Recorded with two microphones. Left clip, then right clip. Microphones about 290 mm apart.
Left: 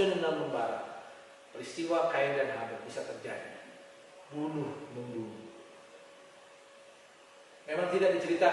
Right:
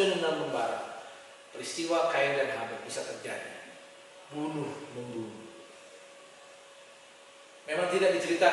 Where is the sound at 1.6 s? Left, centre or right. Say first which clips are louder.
Right 2 dB; centre.